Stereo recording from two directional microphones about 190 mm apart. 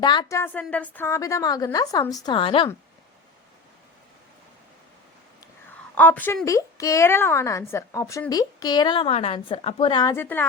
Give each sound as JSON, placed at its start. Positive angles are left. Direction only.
{"t": 0.0, "sound": "a woman's voice", "side_deg": 20}
{"t": 5.9, "sound": "a woman's voice", "side_deg": 10}